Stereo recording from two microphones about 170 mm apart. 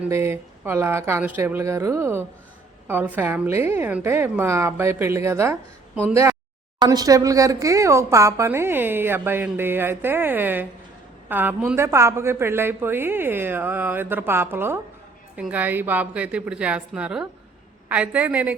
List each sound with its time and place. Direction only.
0.0 s speech: 15° right (ahead or behind)